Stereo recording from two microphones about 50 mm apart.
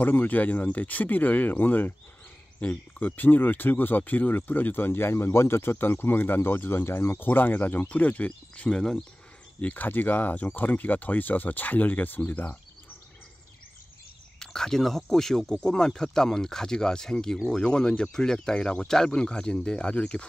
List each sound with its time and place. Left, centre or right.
0.0 s speech: left
8.6 s speech: centre
9.6 s speech: left
14.4 s speech: centre